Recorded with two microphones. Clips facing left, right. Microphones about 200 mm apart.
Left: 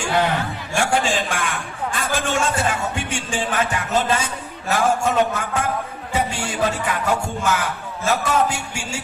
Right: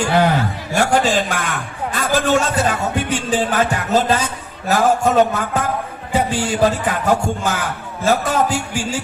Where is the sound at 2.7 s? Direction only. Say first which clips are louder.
Right 4 dB; 40° right (ahead or behind).